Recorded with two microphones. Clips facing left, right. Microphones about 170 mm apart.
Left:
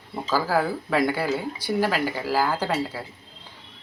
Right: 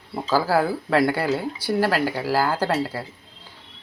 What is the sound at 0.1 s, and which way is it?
Speech, 10° right (ahead or behind).